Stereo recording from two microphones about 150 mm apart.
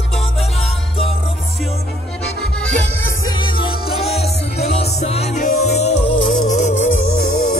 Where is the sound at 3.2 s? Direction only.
30° left (ahead or behind); by 6.8 s 50° left (ahead or behind).